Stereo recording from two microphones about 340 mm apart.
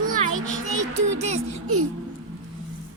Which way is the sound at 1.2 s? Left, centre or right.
Right.